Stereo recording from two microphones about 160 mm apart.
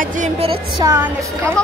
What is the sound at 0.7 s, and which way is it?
Speech, 20° right (ahead or behind).